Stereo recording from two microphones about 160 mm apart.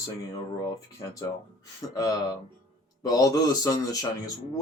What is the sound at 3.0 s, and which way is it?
Speech, 25° left (ahead or behind).